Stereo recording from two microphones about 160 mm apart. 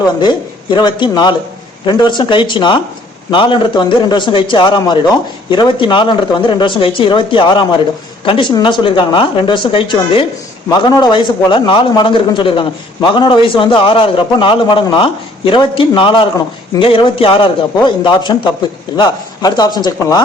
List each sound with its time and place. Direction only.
0.2 s a man's voice: 30° left (ahead or behind)